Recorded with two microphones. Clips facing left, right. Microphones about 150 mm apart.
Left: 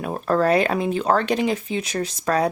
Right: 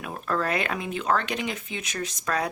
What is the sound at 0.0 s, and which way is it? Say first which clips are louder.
Speech: left 8 dB; 40° left (ahead or behind).